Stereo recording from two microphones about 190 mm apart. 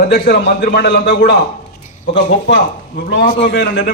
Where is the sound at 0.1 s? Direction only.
55° left (ahead or behind).